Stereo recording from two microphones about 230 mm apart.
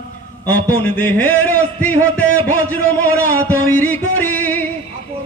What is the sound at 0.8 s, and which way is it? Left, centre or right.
A man's voice, centre.